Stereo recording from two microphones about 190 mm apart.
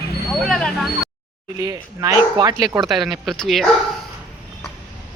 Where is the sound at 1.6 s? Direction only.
20° right (ahead or behind).